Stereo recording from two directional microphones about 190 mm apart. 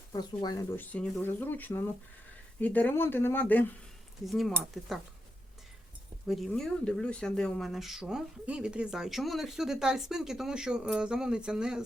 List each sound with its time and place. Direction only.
0.1 s speech: 20° left (ahead or behind)
0.8 s speech: 10° left (ahead or behind)
6.2 s speech: centre (ahead or behind)